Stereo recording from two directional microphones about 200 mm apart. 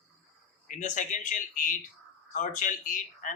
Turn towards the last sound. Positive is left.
turn(degrees=40)  # may be behind; listen again after turning